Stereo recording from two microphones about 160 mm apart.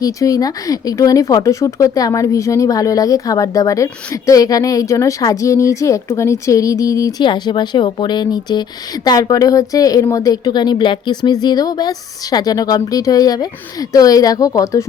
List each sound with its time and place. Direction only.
0.0 s speech: 20° left (ahead or behind)